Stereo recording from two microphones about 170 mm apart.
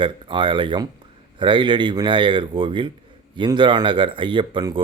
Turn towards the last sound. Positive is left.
turn(degrees=-30)  # may be behind; listen again after turning